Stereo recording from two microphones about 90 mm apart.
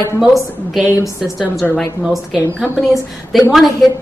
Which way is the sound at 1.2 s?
5° right (ahead or behind).